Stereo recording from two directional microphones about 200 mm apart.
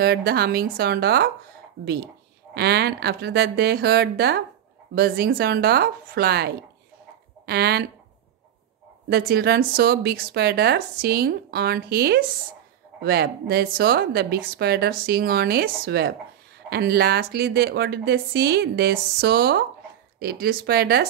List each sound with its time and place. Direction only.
0.0 s speech: 55° right (ahead or behind)
2.5 s speech: 55° right (ahead or behind)
9.1 s speech: 55° right (ahead or behind)